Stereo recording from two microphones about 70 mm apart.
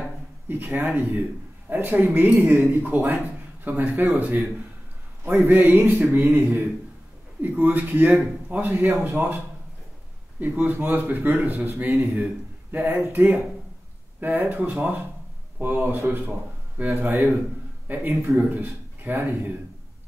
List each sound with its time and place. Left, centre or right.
0.5 s a man's voice: right
10.4 s a man's voice: right